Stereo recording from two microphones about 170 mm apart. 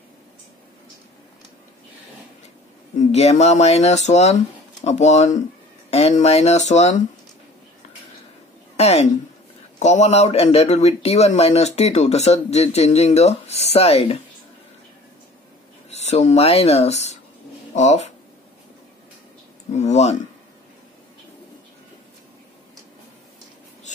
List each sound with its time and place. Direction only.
3.0 s speech: 40° left (ahead or behind)
8.7 s a woman's voice: 40° left (ahead or behind)
15.9 s speech: 40° left (ahead or behind)
19.7 s speech: 40° left (ahead or behind)